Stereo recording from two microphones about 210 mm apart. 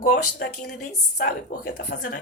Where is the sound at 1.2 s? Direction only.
50° left (ahead or behind).